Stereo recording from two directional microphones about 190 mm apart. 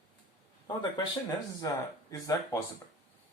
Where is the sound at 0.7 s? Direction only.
20° left (ahead or behind).